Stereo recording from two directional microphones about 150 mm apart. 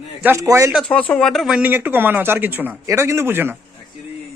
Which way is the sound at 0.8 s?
10° left (ahead or behind).